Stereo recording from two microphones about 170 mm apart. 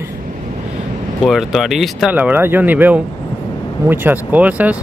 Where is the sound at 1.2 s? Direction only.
Centre (ahead or behind).